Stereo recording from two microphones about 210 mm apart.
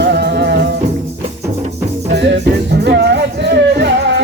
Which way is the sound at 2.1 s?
55° right (ahead or behind).